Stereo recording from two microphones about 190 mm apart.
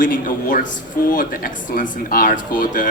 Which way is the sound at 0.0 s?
45° left (ahead or behind).